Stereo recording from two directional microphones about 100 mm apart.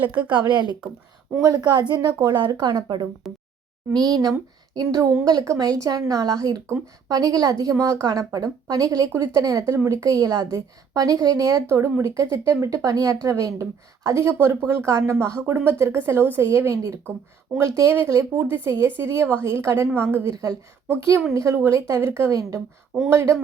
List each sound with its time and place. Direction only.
0.0 s speech: 15° right (ahead or behind)
0.3 s a woman's voice: 50° right (ahead or behind)
1.4 s a woman's voice: 40° right (ahead or behind)
3.2 s a sound: centre (ahead or behind)
3.9 s speech: 5° left (ahead or behind)
4.2 s a woman's voice: 40° right (ahead or behind); by 20.3 s 25° right (ahead or behind)
20.3 s a woman's voice: 40° right (ahead or behind)